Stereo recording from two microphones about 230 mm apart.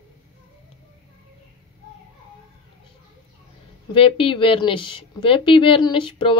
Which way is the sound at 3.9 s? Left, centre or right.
Left.